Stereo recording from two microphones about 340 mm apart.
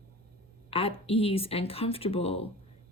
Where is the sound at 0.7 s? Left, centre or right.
Centre.